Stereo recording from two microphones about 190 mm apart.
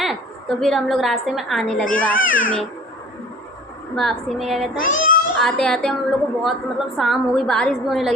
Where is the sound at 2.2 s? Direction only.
90° left.